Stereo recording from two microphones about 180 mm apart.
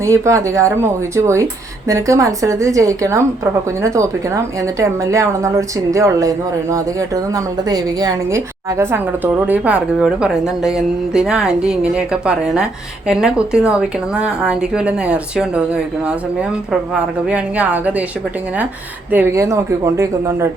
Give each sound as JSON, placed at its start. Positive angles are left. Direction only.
{"t": 0.0, "sound": "a woman's voice", "side_deg": -15}
{"t": 19.1, "sound": "a woman's voice", "side_deg": -15}